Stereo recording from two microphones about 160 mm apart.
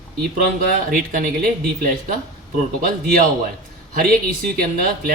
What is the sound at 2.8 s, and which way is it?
Speech, 60° right (ahead or behind).